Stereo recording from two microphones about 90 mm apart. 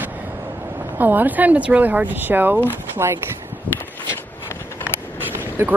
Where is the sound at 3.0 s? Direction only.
30° right (ahead or behind).